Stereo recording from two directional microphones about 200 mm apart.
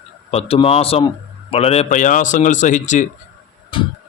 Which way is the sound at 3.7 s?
25° left (ahead or behind).